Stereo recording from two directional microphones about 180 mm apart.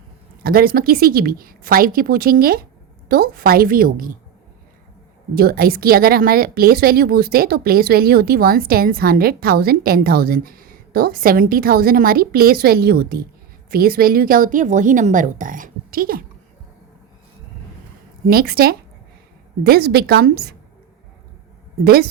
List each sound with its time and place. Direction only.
0.4 s a woman's voice: 55° right (ahead or behind)
5.3 s a woman's voice: 60° right (ahead or behind)
18.3 s speech: 55° right (ahead or behind)